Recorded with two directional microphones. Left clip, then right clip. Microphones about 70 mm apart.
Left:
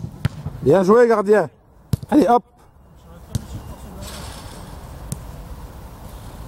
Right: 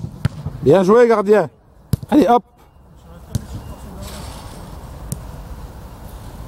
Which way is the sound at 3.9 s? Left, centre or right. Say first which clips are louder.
Even; left.